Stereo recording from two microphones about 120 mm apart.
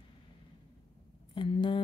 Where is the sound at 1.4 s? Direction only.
40° left (ahead or behind).